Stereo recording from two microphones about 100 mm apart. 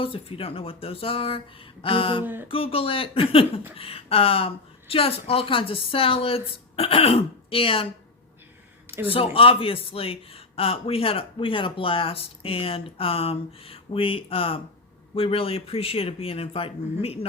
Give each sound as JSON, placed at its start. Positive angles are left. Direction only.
{"t": 0.0, "sound": "speech", "side_deg": 70}
{"t": 1.8, "sound": "a sound", "side_deg": 60}
{"t": 2.2, "sound": "speech", "side_deg": -20}
{"t": 2.5, "sound": "speech", "side_deg": 70}
{"t": 9.0, "sound": "speech", "side_deg": 70}